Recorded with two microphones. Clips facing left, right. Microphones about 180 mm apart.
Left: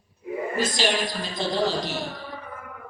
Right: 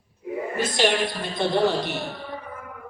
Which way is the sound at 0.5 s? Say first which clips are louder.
Right 3 dB; 60° right (ahead or behind).